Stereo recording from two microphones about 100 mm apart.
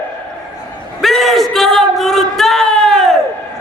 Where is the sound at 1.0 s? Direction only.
Centre (ahead or behind).